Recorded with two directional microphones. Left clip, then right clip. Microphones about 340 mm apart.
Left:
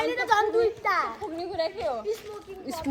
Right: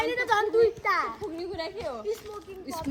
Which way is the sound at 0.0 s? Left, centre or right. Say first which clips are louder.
Left 2 dB; centre.